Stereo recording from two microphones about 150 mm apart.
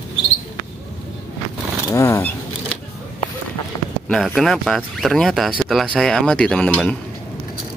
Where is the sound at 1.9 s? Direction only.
20° left (ahead or behind).